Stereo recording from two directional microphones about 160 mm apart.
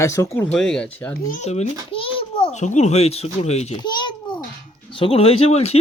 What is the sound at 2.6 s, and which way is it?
Speech, 45° left (ahead or behind).